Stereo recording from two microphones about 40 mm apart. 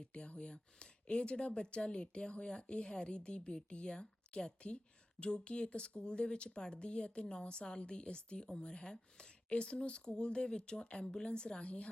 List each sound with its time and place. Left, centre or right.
0.0 s speech: left